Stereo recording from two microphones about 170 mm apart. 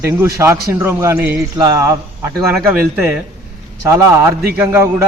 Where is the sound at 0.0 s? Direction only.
15° right (ahead or behind).